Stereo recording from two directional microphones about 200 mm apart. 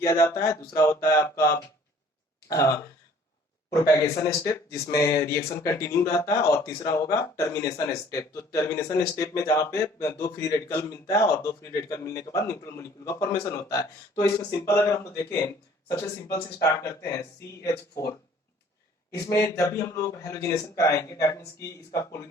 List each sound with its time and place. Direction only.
0.0 s speech: 15° left (ahead or behind)
16.8 s speech: 15° left (ahead or behind)
19.2 s speech: 15° left (ahead or behind)